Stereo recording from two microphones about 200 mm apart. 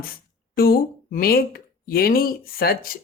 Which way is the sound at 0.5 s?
50° left (ahead or behind).